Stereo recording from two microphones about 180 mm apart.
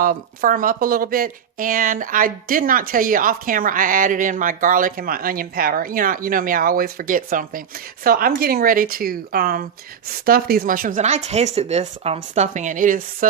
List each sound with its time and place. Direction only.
0.0 s speech: 50° right (ahead or behind)